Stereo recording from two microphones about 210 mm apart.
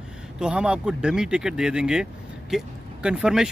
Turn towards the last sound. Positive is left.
turn(degrees=-5)  # may be behind; listen again after turning